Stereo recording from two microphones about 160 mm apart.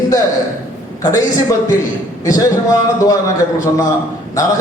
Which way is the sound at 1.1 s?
20° left (ahead or behind).